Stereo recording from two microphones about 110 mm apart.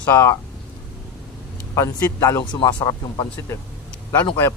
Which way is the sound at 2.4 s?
40° left (ahead or behind).